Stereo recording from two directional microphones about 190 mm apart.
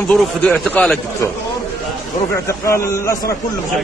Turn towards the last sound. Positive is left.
turn(degrees=15)  # may be behind; listen again after turning